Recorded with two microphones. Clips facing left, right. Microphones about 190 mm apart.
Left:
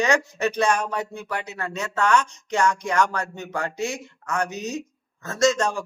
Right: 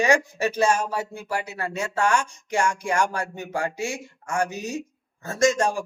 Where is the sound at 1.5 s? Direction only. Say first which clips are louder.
Right 1 dB; 35° right (ahead or behind).